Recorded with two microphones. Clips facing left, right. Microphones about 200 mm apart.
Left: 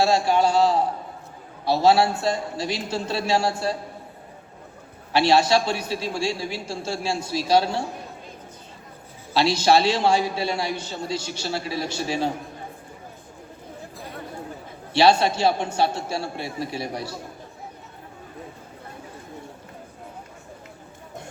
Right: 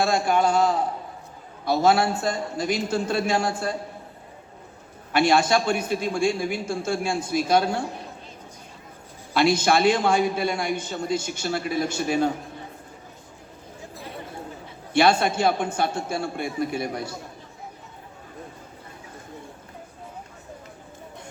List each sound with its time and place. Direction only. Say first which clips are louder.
0.1 s a man's voice: left 1 dB; 50° right (ahead or behind)
1.6 s a man's voice: left 2 dB; 50° right (ahead or behind)
5.1 s a man's voice: left 1 dB; 50° right (ahead or behind)
9.3 s a man's voice: left 1 dB; 50° right (ahead or behind)
14.9 s a man's voice: left 1 dB; 50° right (ahead or behind)